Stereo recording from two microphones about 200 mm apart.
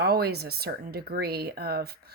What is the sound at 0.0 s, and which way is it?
A woman's voice, 50° right (ahead or behind).